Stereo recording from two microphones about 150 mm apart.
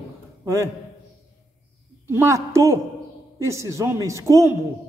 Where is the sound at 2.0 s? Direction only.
20° right (ahead or behind).